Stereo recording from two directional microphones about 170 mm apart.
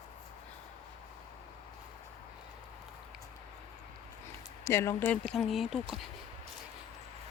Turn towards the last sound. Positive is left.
turn(degrees=0)  # may be behind; listen again after turning